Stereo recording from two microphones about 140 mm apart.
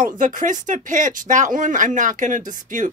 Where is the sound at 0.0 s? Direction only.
65° right (ahead or behind).